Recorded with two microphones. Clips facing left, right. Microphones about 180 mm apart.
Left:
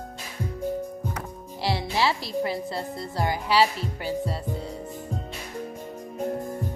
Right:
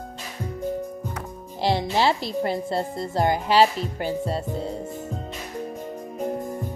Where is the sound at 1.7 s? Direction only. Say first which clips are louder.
Right 5 dB; 45° right (ahead or behind).